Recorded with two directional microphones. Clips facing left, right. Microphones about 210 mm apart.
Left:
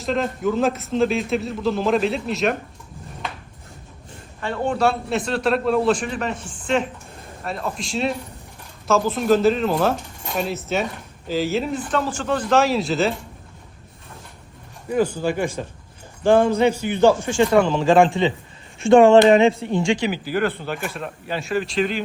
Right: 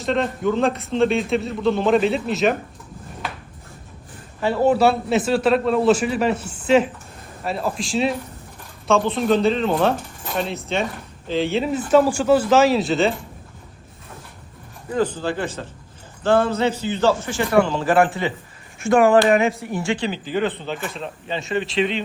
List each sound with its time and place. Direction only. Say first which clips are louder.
0.0 s a man's voice: right 1 dB; centre (ahead or behind)
4.4 s a man's voice: right 5 dB; 5° right (ahead or behind)
14.8 s a man's voice: left 1 dB; 10° left (ahead or behind)
18.8 s speech: left 4 dB; 30° left (ahead or behind)
19.9 s a man's voice: left 2 dB; 10° left (ahead or behind)